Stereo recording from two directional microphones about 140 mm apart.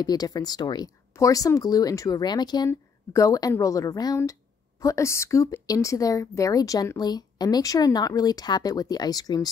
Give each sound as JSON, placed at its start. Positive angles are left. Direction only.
{"t": 0.0, "sound": "a woman's voice", "side_deg": 30}